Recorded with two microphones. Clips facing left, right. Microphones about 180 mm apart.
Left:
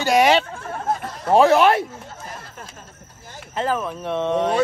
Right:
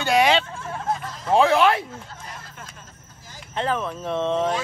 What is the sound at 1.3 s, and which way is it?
Speech, 40° left (ahead or behind).